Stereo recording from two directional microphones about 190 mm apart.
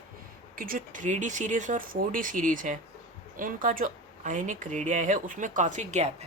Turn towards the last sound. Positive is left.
turn(degrees=-35)  # may be behind; listen again after turning